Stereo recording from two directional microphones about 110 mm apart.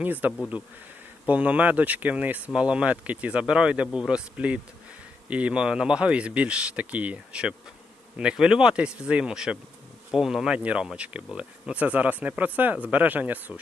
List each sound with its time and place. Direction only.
0.0 s speech: 15° right (ahead or behind)